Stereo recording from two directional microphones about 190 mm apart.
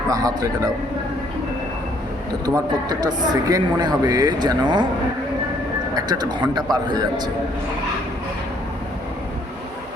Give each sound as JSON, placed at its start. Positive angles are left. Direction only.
{"t": 0.1, "sound": "speech", "side_deg": -20}
{"t": 2.9, "sound": "speech", "side_deg": -20}
{"t": 5.9, "sound": "speech", "side_deg": -20}